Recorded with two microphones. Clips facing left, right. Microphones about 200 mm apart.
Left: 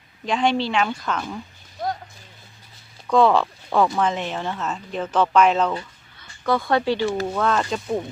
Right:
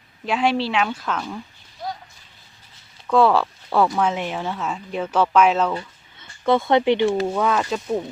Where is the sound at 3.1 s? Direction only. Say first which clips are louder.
Even; 5° right (ahead or behind).